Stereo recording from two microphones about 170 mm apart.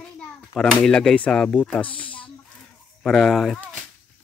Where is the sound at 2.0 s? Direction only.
10° left (ahead or behind).